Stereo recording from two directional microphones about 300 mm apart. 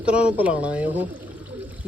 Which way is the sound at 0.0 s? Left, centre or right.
Centre.